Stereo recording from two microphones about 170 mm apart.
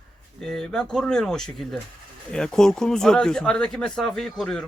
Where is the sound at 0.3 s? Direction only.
5° left (ahead or behind).